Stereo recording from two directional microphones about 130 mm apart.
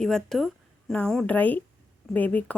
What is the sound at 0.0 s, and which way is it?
A woman's voice, 5° left (ahead or behind).